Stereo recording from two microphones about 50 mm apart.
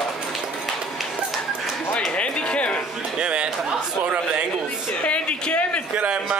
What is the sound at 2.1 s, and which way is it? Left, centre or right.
Music, left.